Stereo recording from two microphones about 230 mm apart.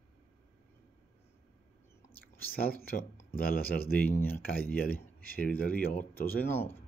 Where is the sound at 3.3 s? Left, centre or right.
Left.